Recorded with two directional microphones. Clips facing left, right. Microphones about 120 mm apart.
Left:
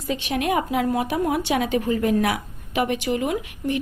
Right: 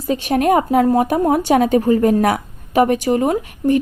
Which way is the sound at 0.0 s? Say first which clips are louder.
Right 8 dB; 40° right (ahead or behind).